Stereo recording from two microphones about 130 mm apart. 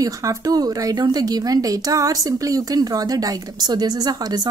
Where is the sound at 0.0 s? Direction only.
25° right (ahead or behind).